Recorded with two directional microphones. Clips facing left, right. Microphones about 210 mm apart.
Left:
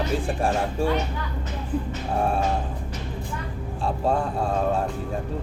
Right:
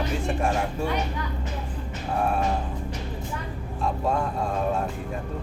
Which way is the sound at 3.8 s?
30° left (ahead or behind).